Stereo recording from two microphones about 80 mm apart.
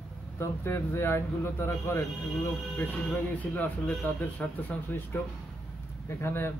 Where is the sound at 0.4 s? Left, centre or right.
Left.